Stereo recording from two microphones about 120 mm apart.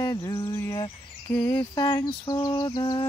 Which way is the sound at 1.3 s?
10° left (ahead or behind).